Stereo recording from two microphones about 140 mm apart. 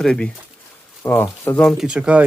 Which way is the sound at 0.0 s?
5° left (ahead or behind).